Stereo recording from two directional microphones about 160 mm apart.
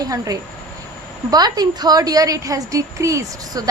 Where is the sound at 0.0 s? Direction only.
25° right (ahead or behind).